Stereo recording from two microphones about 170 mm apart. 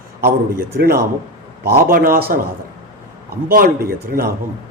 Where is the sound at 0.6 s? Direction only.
65° right (ahead or behind).